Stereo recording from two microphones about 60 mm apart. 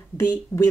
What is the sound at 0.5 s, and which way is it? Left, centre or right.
Speech, left.